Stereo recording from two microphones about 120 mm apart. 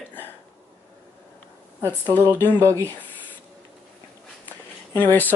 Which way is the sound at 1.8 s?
15° left (ahead or behind).